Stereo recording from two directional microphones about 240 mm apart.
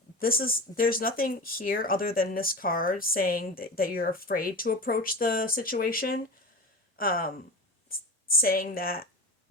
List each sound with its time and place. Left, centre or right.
0.2 s speech: left
8.4 s speech: left